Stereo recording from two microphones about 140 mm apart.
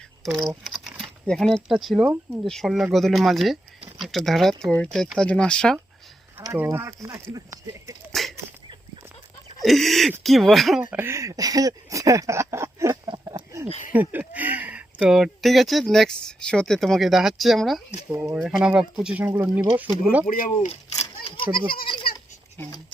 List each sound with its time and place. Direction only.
0.6 s speech: centre (ahead or behind)
6.6 s speech: 15° right (ahead or behind)
8.1 s a sound: centre (ahead or behind)
9.6 s speech: centre (ahead or behind)
10.8 s speech: 15° right (ahead or behind)
13.1 s a sound: 30° right (ahead or behind)
13.7 s speech: 60° left (ahead or behind)
13.9 s speech: 15° right (ahead or behind)
20.2 s speech: 75° left (ahead or behind)
20.7 s a sound: 45° left (ahead or behind)